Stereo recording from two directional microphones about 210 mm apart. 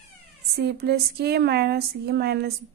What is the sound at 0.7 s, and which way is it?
Speech, 50° right (ahead or behind).